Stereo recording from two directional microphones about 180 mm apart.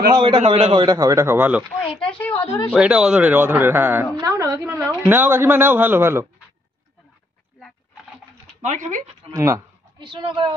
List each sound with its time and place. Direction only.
0.1 s a man's voice: 25° right (ahead or behind)
0.9 s a woman's voice: 15° right (ahead or behind)
2.1 s speech: 10° left (ahead or behind)
2.7 s a woman's voice: 5° right (ahead or behind)
8.5 s speech: 40° right (ahead or behind)
9.3 s speech: 20° right (ahead or behind)